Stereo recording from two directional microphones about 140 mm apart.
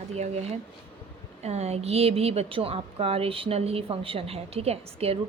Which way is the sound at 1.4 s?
50° right (ahead or behind).